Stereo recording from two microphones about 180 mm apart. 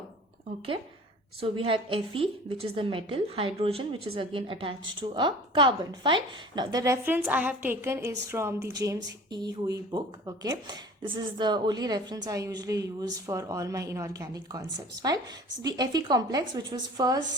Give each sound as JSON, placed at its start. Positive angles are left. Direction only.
{"t": 1.4, "sound": "a woman's voice", "side_deg": -30}